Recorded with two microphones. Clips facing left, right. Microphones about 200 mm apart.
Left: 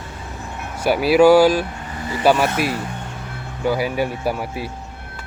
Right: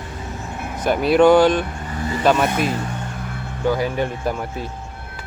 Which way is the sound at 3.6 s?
10° left (ahead or behind).